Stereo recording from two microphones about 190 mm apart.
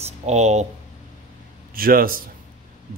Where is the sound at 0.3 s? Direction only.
35° right (ahead or behind).